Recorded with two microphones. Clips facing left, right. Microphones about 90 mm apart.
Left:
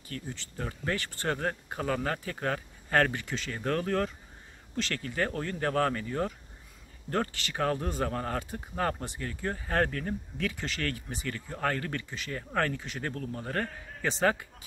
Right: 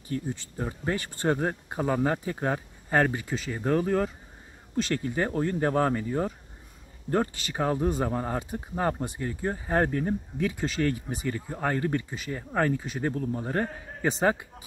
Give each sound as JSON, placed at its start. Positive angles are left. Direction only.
{"t": 0.1, "sound": "speech", "side_deg": -15}